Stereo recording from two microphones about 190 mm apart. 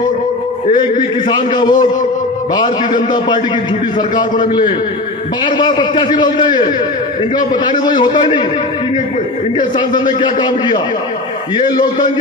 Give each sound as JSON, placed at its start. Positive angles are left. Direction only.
{"t": 0.9, "sound": "a man's voice", "side_deg": 25}
{"t": 9.6, "sound": "a man's voice", "side_deg": 25}